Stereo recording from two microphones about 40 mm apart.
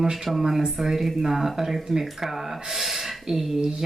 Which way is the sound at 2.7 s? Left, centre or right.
Centre.